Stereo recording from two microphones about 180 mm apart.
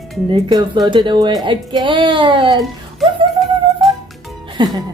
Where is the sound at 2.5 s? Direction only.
Centre (ahead or behind).